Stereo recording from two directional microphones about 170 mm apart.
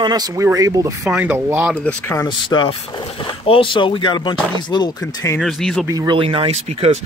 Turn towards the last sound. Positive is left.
turn(degrees=-35)  # may be behind; listen again after turning